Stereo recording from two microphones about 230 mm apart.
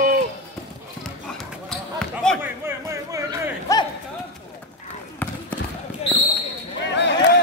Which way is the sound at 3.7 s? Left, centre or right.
Centre.